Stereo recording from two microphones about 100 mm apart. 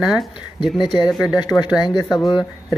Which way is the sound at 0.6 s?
50° left (ahead or behind).